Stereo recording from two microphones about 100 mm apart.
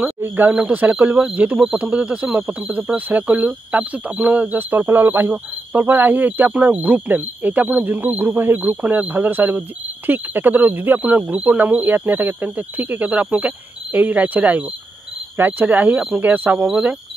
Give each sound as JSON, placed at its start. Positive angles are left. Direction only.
{"t": 0.0, "sound": "speech", "side_deg": -15}